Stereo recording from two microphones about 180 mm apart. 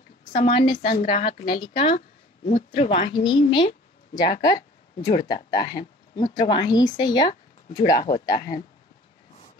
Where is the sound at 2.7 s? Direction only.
40° left (ahead or behind).